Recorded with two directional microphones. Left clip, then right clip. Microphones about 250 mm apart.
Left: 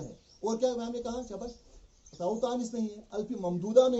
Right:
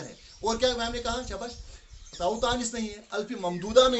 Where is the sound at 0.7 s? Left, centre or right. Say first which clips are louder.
Right 5 dB; right.